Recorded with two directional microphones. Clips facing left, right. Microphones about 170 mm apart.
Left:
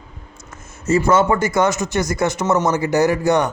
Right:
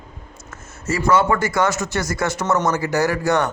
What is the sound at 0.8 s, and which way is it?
A man's voice, 25° left (ahead or behind).